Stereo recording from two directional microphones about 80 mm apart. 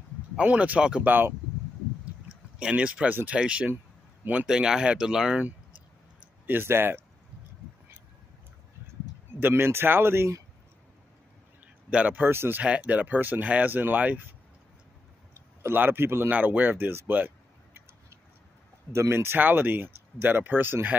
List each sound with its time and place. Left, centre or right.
0.4 s speech: centre
1.0 s speech: right
2.6 s a man's voice: centre
4.5 s speech: centre
6.4 s speech: right
9.4 s speech: right
11.6 s a man's voice: centre
12.6 s speech: centre
15.6 s speech: right
18.9 s speech: right